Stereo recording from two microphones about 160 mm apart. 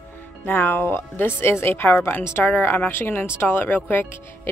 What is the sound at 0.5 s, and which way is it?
Speech, 10° left (ahead or behind).